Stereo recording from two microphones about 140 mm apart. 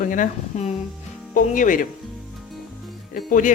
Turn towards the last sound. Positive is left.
turn(degrees=80)